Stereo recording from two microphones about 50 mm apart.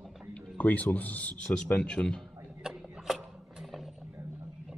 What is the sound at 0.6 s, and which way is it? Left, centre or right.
Speech, left.